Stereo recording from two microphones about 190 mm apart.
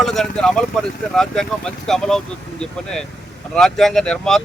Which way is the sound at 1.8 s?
Centre (ahead or behind).